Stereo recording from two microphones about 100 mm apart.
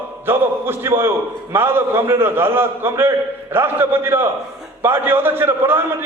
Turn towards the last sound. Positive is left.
turn(degrees=-25)  # may be behind; listen again after turning